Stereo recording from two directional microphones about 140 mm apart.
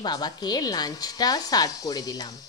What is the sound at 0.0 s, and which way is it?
A woman's voice, 30° left (ahead or behind).